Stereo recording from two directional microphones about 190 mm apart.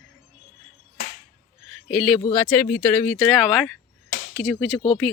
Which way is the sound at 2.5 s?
5° left (ahead or behind).